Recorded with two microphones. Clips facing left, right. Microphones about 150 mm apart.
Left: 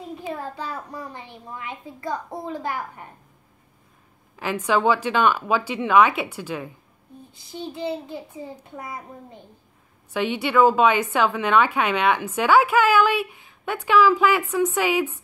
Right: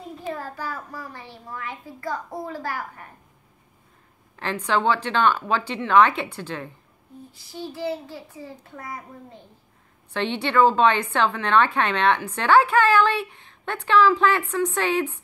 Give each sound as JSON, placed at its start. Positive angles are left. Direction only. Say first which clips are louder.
{"t": 0.3, "sound": "a child's voice", "louder": "even", "side_deg": 20}
{"t": 4.4, "sound": "a woman's voice", "louder": "left 2 dB", "side_deg": 10}
{"t": 7.3, "sound": "a child's voice", "louder": "left 1 dB", "side_deg": 20}